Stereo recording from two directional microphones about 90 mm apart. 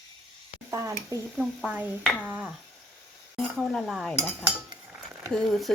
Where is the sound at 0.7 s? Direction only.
35° right (ahead or behind).